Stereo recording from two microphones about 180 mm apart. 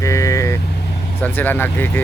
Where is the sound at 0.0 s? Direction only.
15° left (ahead or behind).